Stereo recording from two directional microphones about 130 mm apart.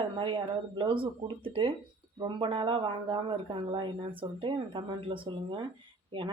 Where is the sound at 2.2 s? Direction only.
40° right (ahead or behind).